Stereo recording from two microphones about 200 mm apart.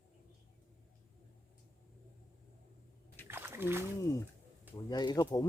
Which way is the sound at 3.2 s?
10° right (ahead or behind).